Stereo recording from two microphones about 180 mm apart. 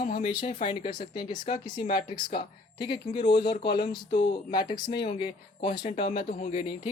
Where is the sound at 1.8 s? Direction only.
55° left (ahead or behind).